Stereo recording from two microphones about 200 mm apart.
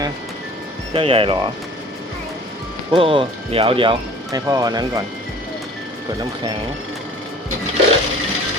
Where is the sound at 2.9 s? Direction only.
25° right (ahead or behind).